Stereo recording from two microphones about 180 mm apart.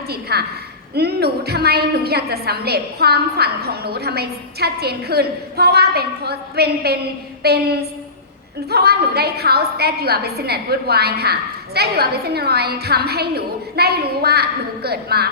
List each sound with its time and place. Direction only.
0.1 s a woman's voice: 60° right (ahead or behind)